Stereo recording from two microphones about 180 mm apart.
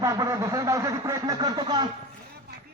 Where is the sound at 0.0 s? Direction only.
15° right (ahead or behind).